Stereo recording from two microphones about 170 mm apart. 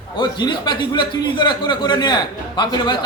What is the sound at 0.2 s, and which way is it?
A man's voice, 25° left (ahead or behind).